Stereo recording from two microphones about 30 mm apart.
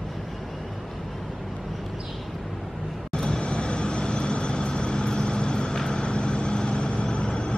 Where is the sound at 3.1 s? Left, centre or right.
Left.